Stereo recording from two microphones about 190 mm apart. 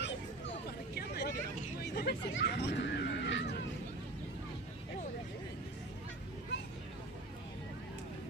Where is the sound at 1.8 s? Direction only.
60° left (ahead or behind).